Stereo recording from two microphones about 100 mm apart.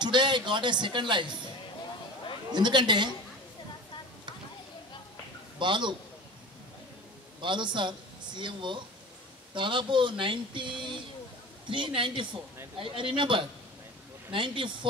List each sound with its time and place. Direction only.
0.0 s a man's voice: 50° right (ahead or behind)
2.5 s a man's voice: 50° right (ahead or behind)
5.6 s a man's voice: 50° right (ahead or behind)
7.4 s speech: 50° right (ahead or behind)